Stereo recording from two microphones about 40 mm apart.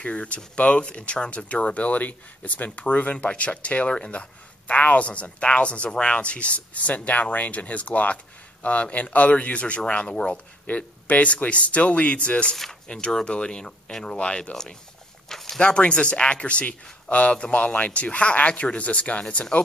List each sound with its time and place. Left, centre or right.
0.0 s speech: left
10.7 s speech: left
12.8 s speech: centre
14.5 s speech: centre
15.2 s a sound: centre
15.6 s speech: left